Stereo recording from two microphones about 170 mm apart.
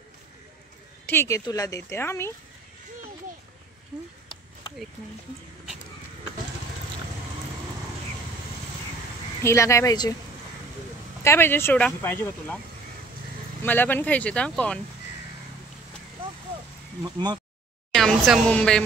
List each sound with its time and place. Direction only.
1.0 s a woman's voice: 15° left (ahead or behind)
9.4 s speech: 15° left (ahead or behind)
11.2 s speech: 15° left (ahead or behind)
13.6 s speech: 10° left (ahead or behind)
17.0 s speech: 25° right (ahead or behind)
17.9 s speech: centre (ahead or behind)